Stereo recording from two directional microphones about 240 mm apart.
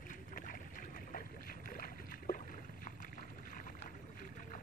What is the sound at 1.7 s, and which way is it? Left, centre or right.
Rowboat, left.